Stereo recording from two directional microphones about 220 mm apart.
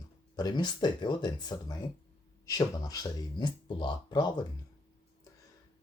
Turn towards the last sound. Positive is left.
turn(degrees=20)  # may be behind; listen again after turning